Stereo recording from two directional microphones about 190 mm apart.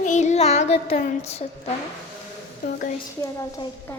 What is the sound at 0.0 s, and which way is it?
Child singing, 40° left (ahead or behind).